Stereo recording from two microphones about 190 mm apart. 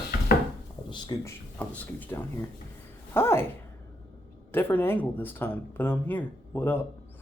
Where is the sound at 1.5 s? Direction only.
10° left (ahead or behind).